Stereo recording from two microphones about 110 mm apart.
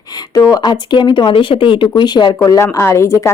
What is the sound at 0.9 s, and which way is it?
A woman's voice, 45° left (ahead or behind).